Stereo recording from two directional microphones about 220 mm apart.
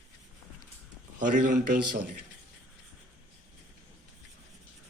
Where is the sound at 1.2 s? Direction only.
35° right (ahead or behind).